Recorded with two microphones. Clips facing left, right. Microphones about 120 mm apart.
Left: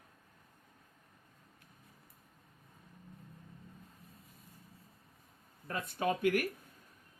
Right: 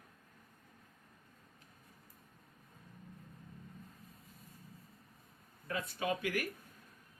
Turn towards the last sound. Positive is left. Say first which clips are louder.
# left 5 dB
turn(degrees=50)  # may be behind; listen again after turning